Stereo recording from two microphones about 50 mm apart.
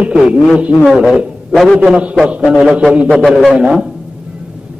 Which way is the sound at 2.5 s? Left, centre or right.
Centre.